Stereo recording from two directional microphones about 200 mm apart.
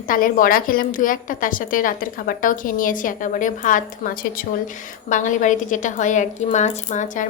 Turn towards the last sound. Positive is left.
turn(degrees=35)  # may be behind; listen again after turning